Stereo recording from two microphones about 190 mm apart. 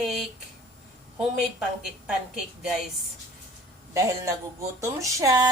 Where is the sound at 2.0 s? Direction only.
Centre (ahead or behind).